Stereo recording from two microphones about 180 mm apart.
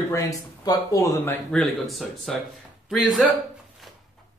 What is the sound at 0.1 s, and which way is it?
Speech, 20° left (ahead or behind).